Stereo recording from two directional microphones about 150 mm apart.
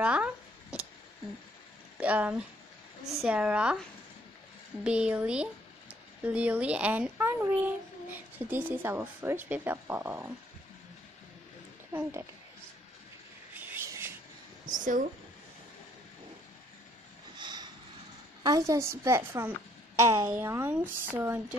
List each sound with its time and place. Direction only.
0.0 s a sound: 10° right (ahead or behind)
2.0 s speech: 10° right (ahead or behind)
4.8 s speech: 5° right (ahead or behind)
11.9 s speech: 15° right (ahead or behind)
13.6 s a sound: 15° right (ahead or behind)
14.7 s speech: 60° right (ahead or behind)
17.4 s vehicle: 30° right (ahead or behind)
18.7 s a woman's voice: 20° right (ahead or behind)